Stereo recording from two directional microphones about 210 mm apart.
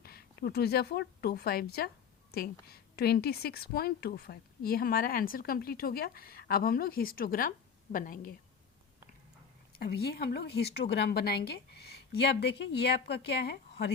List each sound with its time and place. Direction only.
0.0 s a woman's voice: 45° left (ahead or behind)
9.7 s a woman's voice: 50° left (ahead or behind)